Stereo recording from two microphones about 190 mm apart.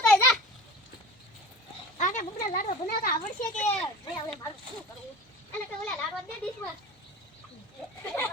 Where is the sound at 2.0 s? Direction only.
40° left (ahead or behind).